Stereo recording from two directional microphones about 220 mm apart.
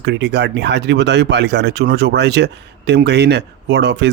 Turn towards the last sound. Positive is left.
turn(degrees=-50)  # may be behind; listen again after turning